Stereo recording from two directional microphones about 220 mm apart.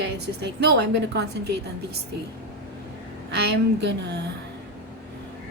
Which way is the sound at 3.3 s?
50° right (ahead or behind).